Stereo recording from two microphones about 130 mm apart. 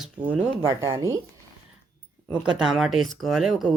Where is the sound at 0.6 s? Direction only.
25° right (ahead or behind).